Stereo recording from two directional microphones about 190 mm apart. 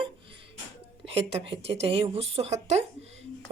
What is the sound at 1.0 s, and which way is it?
Speech, 30° right (ahead or behind).